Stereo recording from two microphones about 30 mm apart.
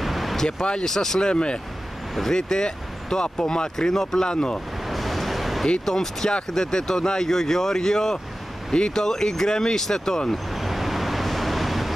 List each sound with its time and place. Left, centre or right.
0.0 s vehicle: centre
0.5 s speech: left
0.8 s speech: centre
1.2 s speech: left; by 4.3 s centre
4.3 s speech: left
4.8 s vehicle: centre
5.9 s speech: centre
8.7 s speech: left
9.0 s speech: centre
10.5 s vehicle: centre